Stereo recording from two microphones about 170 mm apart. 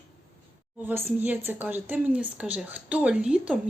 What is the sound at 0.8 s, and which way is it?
A woman's voice, 10° right (ahead or behind).